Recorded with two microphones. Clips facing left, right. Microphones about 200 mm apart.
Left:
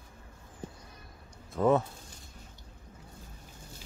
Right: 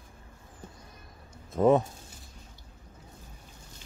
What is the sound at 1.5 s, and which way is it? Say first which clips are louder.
Speech: right 3 dB; 20° right (ahead or behind).